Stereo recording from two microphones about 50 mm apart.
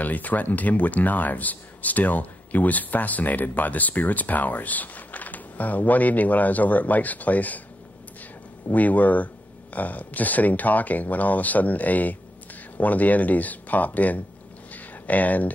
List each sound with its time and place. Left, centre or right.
0.0 s speech: left
8.6 s speech: left
14.7 s a sound: left